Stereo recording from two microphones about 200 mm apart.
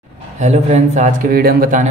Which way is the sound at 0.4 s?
35° right (ahead or behind).